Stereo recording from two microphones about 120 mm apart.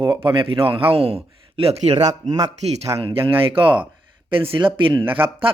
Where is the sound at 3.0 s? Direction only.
50° right (ahead or behind).